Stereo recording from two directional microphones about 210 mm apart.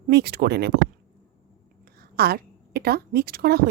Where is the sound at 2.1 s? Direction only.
45° right (ahead or behind).